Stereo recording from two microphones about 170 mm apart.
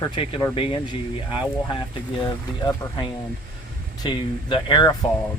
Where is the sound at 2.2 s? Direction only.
30° left (ahead or behind).